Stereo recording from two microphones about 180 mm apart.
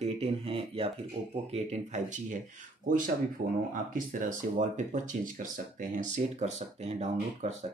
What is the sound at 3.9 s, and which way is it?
Speech, 50° right (ahead or behind).